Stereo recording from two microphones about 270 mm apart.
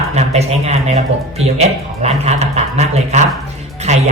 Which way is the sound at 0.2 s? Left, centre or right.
Right.